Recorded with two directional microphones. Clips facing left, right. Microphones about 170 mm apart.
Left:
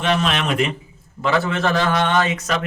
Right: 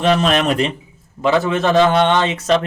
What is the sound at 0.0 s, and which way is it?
Speech, 35° right (ahead or behind).